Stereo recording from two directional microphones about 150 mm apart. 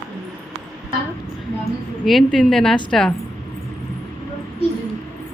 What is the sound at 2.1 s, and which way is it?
Speech, centre (ahead or behind).